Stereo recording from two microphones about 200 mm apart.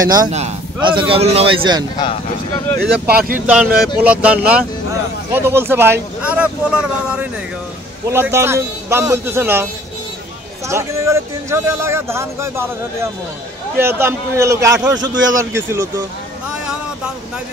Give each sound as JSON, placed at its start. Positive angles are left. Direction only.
{"t": 0.0, "sound": "a man's voice", "side_deg": -20}
{"t": 2.0, "sound": "speech", "side_deg": 25}
{"t": 3.3, "sound": "speech", "side_deg": -5}
{"t": 10.7, "sound": "speech", "side_deg": -15}